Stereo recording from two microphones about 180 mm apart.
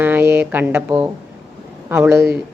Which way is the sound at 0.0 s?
10° right (ahead or behind).